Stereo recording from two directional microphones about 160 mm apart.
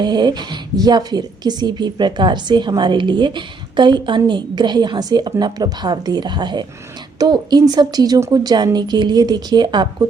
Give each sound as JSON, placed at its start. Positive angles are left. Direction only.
{"t": 0.0, "sound": "a woman's voice", "side_deg": -25}